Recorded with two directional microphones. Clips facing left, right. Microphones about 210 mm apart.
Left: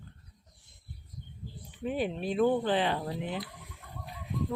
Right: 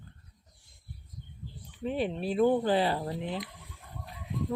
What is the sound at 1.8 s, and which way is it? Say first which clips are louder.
Speech: right 1 dB; centre (ahead or behind).